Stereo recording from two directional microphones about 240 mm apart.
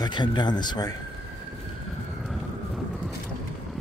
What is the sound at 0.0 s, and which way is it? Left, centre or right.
Speech, centre.